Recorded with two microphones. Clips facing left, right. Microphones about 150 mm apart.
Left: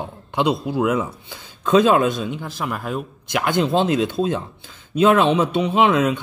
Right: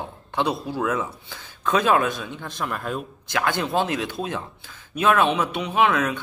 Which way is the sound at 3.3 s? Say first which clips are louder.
Left 4 dB; 20° left (ahead or behind).